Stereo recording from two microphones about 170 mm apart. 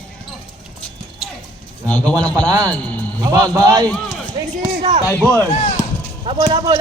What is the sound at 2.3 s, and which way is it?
Speech, 20° right (ahead or behind).